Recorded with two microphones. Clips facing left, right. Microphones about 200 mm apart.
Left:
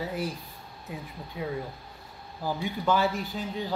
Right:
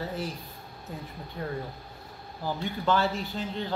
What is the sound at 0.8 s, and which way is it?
Speech, 10° left (ahead or behind).